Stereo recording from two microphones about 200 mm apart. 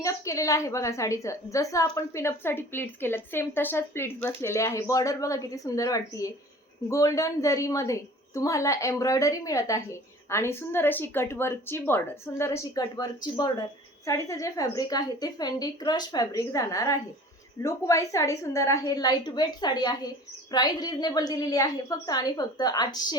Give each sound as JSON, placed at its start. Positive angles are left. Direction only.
{"t": 0.0, "sound": "a woman's voice", "side_deg": 15}